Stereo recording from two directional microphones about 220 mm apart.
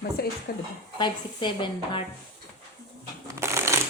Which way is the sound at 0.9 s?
20° left (ahead or behind).